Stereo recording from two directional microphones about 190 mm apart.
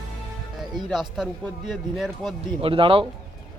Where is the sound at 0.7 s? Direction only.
Centre (ahead or behind).